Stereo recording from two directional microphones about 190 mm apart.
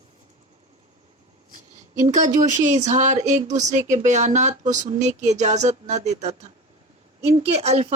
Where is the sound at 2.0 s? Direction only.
40° right (ahead or behind).